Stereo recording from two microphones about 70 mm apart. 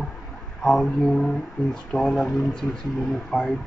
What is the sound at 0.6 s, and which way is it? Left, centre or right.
Speech, centre.